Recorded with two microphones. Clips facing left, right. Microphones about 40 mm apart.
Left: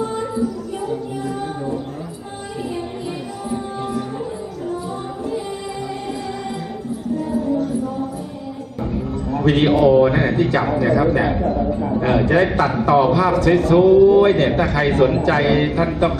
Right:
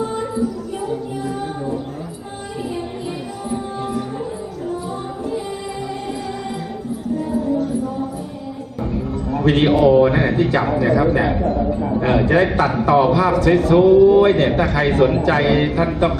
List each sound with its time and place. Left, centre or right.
0.0 s music: centre
3.5 s music: centre
7.3 s a sound: centre
9.3 s a man's voice: centre